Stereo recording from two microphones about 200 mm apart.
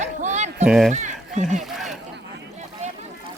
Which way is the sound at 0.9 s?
40° right (ahead or behind).